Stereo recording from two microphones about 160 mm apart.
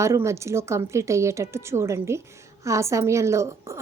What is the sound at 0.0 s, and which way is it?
A woman's voice, 20° right (ahead or behind).